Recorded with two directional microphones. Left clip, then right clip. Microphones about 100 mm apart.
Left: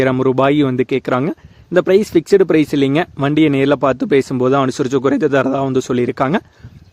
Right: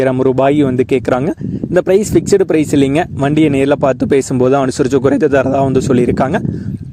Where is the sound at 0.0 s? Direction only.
20° right (ahead or behind).